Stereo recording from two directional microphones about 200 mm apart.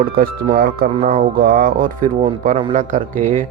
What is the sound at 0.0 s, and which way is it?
Speech, 45° right (ahead or behind).